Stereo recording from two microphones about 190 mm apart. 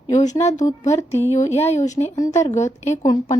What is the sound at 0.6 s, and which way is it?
Speech, 15° left (ahead or behind).